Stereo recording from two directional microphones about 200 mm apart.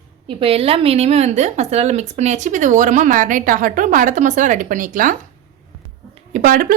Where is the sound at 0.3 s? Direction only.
25° right (ahead or behind).